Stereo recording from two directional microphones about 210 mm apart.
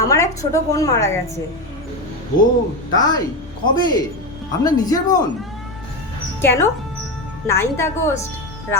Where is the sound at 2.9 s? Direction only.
20° left (ahead or behind).